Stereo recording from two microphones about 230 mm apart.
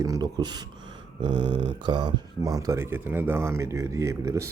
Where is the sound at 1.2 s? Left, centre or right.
Centre.